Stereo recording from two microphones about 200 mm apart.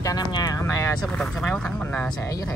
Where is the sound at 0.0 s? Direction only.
20° left (ahead or behind).